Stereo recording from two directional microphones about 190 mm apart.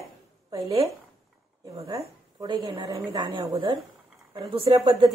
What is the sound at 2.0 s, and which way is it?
A woman's voice, 20° right (ahead or behind).